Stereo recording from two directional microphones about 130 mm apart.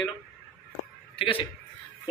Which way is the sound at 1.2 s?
45° left (ahead or behind).